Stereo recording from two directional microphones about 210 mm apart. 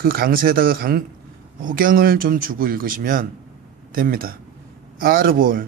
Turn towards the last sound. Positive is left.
turn(degrees=-40)  # may be behind; listen again after turning